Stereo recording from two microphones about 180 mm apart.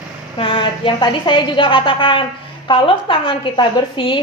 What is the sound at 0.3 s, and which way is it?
A woman's voice, 30° left (ahead or behind).